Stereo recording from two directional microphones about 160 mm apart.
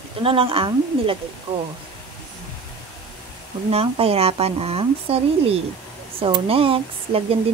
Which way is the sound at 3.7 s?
40° right (ahead or behind).